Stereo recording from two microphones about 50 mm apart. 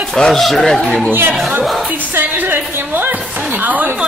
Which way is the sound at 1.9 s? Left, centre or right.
Right.